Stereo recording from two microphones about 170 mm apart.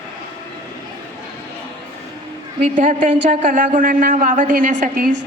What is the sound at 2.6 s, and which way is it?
A woman's voice, 50° right (ahead or behind).